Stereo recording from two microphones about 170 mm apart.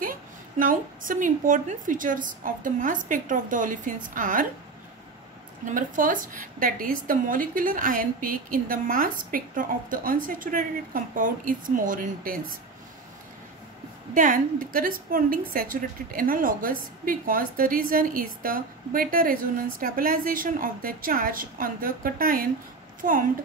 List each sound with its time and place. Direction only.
0.6 s a woman's voice: 55° right (ahead or behind)
5.7 s a woman's voice: 50° right (ahead or behind)
14.1 s a woman's voice: 50° right (ahead or behind)